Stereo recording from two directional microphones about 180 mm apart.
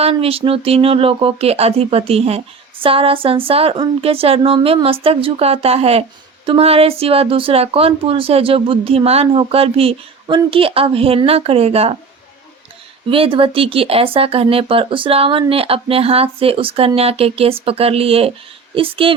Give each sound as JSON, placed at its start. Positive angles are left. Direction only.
{"t": 0.0, "sound": "speech", "side_deg": -30}
{"t": 13.1, "sound": "speech", "side_deg": -30}